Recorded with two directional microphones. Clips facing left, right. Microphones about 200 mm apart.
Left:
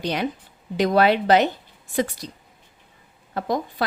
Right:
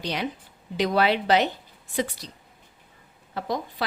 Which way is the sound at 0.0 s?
50° left (ahead or behind).